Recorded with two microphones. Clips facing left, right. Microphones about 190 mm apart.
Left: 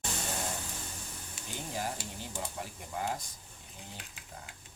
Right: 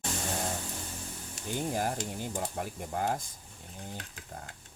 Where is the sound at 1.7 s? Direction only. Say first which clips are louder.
Right 3 dB; 50° right (ahead or behind).